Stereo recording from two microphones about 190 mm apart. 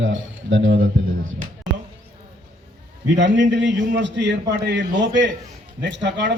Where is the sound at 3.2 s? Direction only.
70° right (ahead or behind).